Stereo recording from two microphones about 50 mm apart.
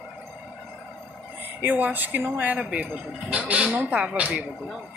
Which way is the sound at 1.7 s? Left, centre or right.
Right.